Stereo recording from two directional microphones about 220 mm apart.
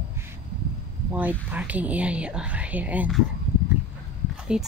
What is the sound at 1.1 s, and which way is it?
Speech, 5° right (ahead or behind).